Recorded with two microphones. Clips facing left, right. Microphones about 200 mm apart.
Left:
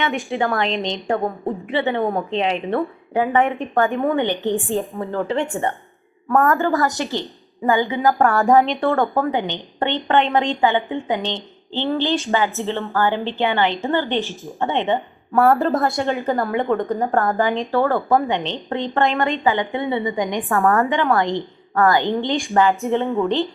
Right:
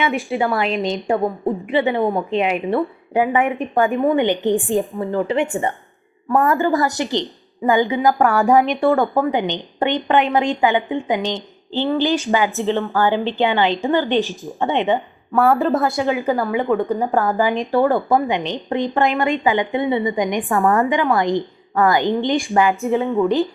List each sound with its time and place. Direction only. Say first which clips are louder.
0.1 s speech: right 2 dB; centre (ahead or behind)
8.2 s a woman's voice: left 1 dB; 5° right (ahead or behind)
8.4 s speech: right 2 dB; 15° right (ahead or behind)
15.4 s a woman's voice: even; centre (ahead or behind)
17.5 s speech: right 2 dB; 15° right (ahead or behind)
22.7 s a woman's voice: right 1 dB; centre (ahead or behind)